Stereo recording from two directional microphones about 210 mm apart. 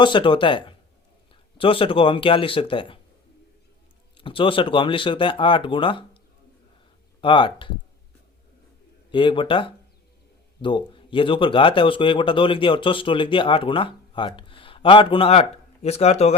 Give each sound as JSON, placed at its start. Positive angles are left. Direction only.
{"t": 0.0, "sound": "speech", "side_deg": 25}
{"t": 4.2, "sound": "speech", "side_deg": 25}
{"t": 7.2, "sound": "speech", "side_deg": 25}
{"t": 9.1, "sound": "speech", "side_deg": 25}